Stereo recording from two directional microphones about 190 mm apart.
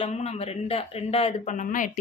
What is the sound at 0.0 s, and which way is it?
Speech, 35° left (ahead or behind).